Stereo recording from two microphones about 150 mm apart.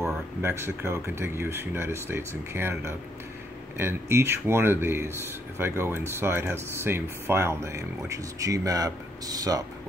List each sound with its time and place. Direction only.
0.4 s speech: 15° right (ahead or behind)
3.7 s speech: 15° right (ahead or behind)